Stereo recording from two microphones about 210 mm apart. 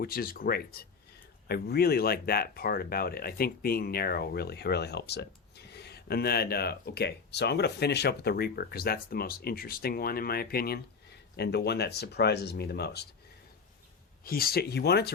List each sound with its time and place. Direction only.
0.0 s speech: 45° left (ahead or behind)
14.3 s speech: 45° left (ahead or behind)